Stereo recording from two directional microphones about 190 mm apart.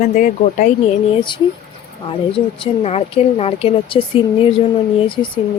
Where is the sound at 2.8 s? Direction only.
35° left (ahead or behind).